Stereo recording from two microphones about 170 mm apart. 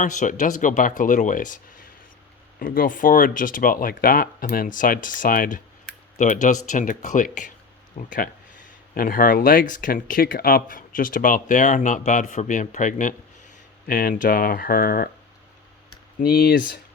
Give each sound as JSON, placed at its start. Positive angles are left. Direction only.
{"t": 0.0, "sound": "speech", "side_deg": 50}
{"t": 16.2, "sound": "speech", "side_deg": 65}